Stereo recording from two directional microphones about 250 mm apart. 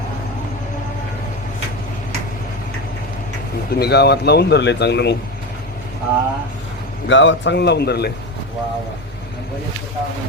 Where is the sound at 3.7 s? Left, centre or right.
Left.